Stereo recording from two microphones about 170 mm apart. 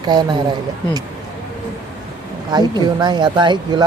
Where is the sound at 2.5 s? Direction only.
25° right (ahead or behind).